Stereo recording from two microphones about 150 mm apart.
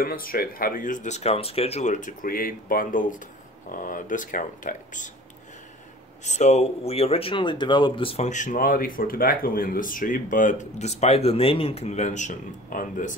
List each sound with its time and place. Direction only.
0.0 s speech: 75° left (ahead or behind); by 5.1 s 60° left (ahead or behind)
6.2 s speech: 50° left (ahead or behind)
8.3 s speech: 55° left (ahead or behind)